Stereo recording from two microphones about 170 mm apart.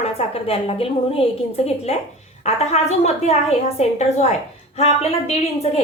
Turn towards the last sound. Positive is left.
turn(degrees=40)  # may be behind; listen again after turning